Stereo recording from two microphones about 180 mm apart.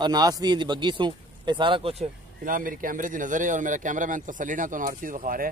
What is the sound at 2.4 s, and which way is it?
Speech, 50° right (ahead or behind).